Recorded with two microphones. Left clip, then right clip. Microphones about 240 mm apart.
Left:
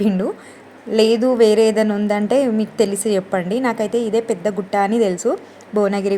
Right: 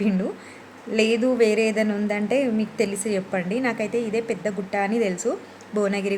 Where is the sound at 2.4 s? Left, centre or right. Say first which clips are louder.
Left 6 dB; left.